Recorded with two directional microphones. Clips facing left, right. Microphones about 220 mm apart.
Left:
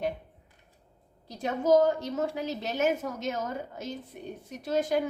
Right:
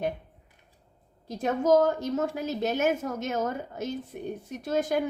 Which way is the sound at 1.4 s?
45° right (ahead or behind).